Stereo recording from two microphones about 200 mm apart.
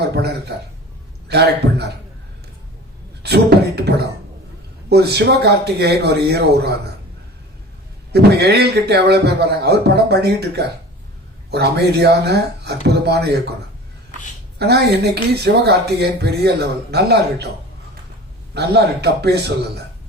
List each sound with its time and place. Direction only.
0.0 s a man's voice: 55° right (ahead or behind)
3.2 s beatboxing: 55° right (ahead or behind)
4.9 s speech: 55° right (ahead or behind)
8.1 s speech: 55° right (ahead or behind)
14.6 s speech: 55° right (ahead or behind)
18.5 s speech: 55° right (ahead or behind)